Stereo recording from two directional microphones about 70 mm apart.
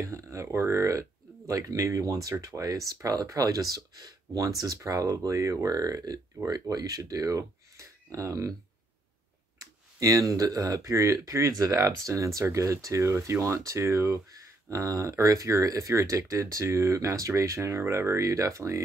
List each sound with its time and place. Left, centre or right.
0.0 s speech: right
9.6 s speech: right